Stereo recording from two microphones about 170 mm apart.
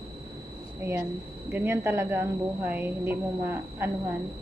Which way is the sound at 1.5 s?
15° right (ahead or behind).